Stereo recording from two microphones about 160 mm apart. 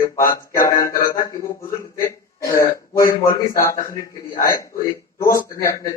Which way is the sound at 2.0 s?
20° left (ahead or behind).